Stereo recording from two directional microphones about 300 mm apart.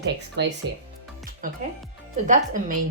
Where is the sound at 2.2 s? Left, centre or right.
Right.